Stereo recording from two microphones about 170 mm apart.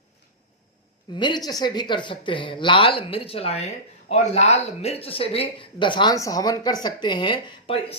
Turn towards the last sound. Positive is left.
turn(degrees=30)  # may be behind; listen again after turning